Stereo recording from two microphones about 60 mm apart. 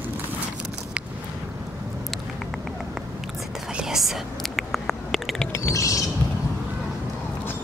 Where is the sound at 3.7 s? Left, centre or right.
Centre.